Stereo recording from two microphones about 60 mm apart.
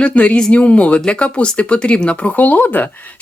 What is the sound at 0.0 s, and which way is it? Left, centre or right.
Speech, left.